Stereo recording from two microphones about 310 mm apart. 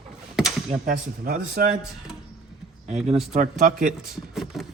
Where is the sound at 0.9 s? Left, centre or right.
Right.